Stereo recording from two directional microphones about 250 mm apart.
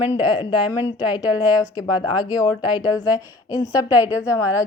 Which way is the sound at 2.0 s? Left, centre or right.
Centre.